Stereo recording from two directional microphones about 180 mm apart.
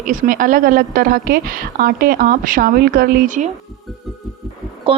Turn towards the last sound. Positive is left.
turn(degrees=-30)  # may be behind; listen again after turning